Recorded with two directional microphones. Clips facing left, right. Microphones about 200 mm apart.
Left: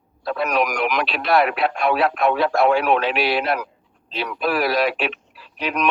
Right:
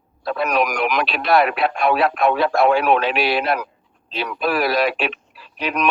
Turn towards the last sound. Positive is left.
turn(degrees=-50)  # may be behind; listen again after turning